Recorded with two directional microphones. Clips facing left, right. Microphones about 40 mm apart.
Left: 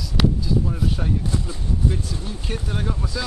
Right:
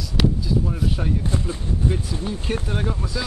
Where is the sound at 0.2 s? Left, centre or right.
Centre.